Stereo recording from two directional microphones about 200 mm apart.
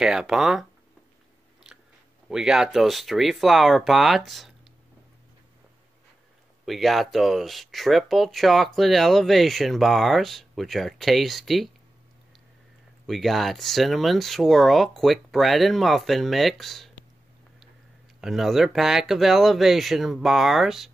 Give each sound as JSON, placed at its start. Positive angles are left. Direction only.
{"t": 0.0, "sound": "speech", "side_deg": -5}
{"t": 2.2, "sound": "speech", "side_deg": -5}
{"t": 6.6, "sound": "speech", "side_deg": 0}
{"t": 13.0, "sound": "speech", "side_deg": 0}
{"t": 18.2, "sound": "speech", "side_deg": 0}